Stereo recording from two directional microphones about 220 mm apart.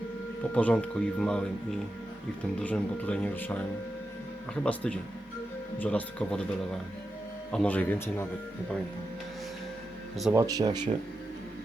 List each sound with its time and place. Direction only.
0.5 s speech: 5° left (ahead or behind)
2.6 s speech: 5° left (ahead or behind)
4.6 s speech: 5° left (ahead or behind)
10.3 s speech: 15° right (ahead or behind)